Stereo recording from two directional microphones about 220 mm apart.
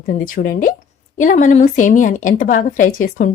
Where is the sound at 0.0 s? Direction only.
40° left (ahead or behind).